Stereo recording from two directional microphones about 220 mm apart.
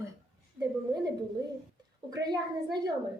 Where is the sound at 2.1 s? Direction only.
20° right (ahead or behind).